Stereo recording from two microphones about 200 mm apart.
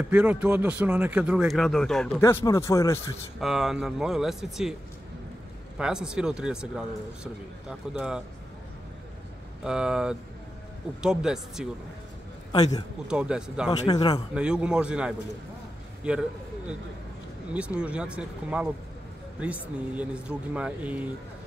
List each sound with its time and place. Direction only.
0.1 s speech: 5° right (ahead or behind)
2.2 s speech: 15° left (ahead or behind)
3.3 s speech: centre (ahead or behind)
5.8 s speech: 5° right (ahead or behind)
7.9 s speech: 5° right (ahead or behind)
9.6 s speech: 5° right (ahead or behind)
13.1 s speech: 5° right (ahead or behind)
13.7 s a man's voice: 20° left (ahead or behind)
14.3 s a man's voice: 5° right (ahead or behind)